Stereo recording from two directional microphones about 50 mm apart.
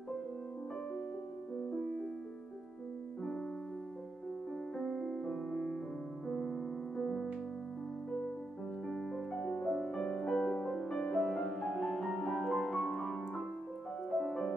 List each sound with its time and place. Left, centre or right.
4.7 s music: centre
6.2 s music: centre
8.8 s music: centre
11.0 s music: left
11.5 s music: centre